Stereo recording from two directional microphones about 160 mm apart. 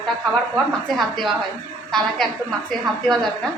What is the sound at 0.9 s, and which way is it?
Speech, centre (ahead or behind).